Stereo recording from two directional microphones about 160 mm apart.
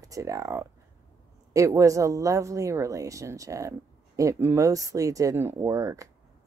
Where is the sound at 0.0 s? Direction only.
20° right (ahead or behind).